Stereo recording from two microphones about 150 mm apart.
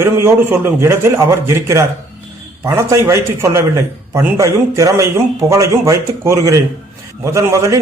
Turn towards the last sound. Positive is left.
turn(degrees=-20)  # may be behind; listen again after turning